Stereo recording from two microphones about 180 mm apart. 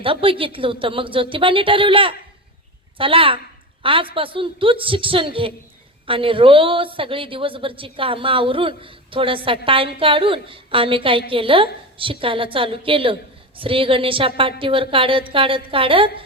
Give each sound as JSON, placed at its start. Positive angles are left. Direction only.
{"t": 0.0, "sound": "a woman's voice", "side_deg": -30}